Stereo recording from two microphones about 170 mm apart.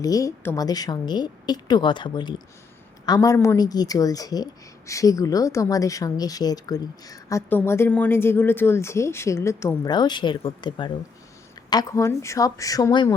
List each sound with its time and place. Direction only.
0.0 s a woman's voice: 20° left (ahead or behind)